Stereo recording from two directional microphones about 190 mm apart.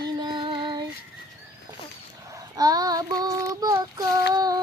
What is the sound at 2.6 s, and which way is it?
Speech, 20° right (ahead or behind).